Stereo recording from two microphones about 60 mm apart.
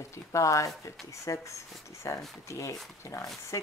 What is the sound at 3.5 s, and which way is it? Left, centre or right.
Speech, left.